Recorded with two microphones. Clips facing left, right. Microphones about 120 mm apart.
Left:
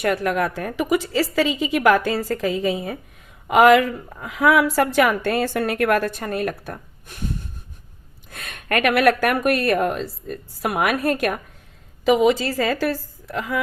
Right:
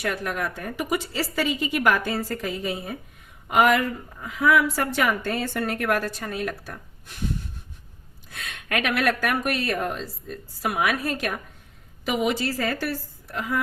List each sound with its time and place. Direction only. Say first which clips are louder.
0.0 s a woman's voice: left 7 dB; 65° left (ahead or behind)
8.3 s speech: left 5 dB; 50° left (ahead or behind)
12.5 s a woman's voice: left 5 dB; 90° left